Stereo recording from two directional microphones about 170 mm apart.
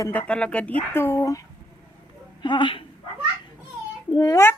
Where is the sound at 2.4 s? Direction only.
30° left (ahead or behind).